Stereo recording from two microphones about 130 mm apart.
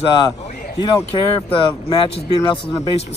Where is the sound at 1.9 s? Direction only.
40° left (ahead or behind).